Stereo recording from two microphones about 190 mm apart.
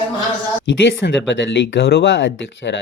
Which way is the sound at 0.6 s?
70° left (ahead or behind).